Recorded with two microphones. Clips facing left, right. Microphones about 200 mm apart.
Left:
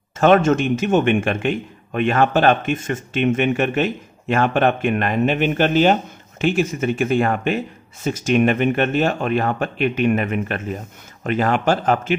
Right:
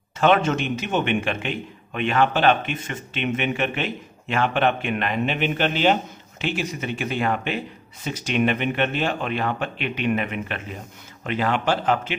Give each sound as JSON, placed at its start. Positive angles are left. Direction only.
{"t": 0.2, "sound": "a man's voice", "side_deg": 45}